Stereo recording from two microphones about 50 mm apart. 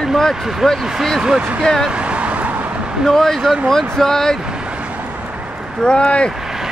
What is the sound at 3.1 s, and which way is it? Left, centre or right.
Speech, centre.